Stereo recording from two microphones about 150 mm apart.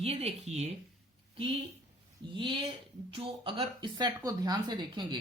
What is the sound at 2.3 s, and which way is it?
Speech, 35° right (ahead or behind).